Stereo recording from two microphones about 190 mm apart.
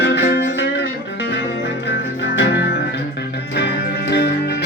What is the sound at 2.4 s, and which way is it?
Music, 60° left (ahead or behind).